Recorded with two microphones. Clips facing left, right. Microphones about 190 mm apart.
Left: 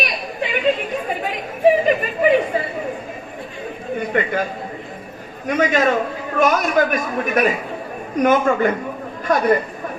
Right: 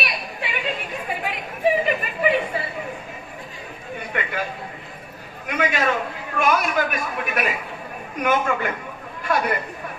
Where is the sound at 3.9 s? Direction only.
45° left (ahead or behind).